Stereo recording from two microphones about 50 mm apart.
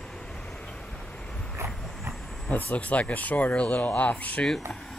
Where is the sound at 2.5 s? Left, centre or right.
Left.